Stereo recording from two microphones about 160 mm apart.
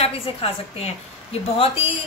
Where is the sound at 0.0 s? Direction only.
35° left (ahead or behind).